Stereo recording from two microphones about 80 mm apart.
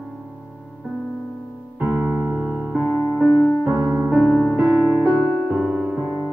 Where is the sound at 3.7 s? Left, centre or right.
Right.